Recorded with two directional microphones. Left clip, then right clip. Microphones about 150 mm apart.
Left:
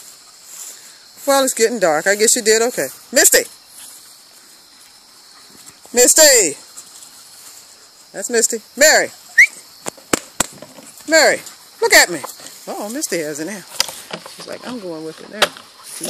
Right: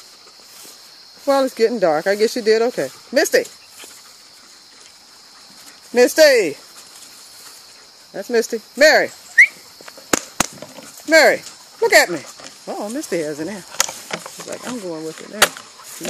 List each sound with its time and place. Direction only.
1.2 s speech: centre (ahead or behind)
5.9 s speech: centre (ahead or behind)
8.1 s speech: centre (ahead or behind)
10.1 s a sound: 15° left (ahead or behind)
10.6 s horse: centre (ahead or behind)
12.6 s speech: centre (ahead or behind)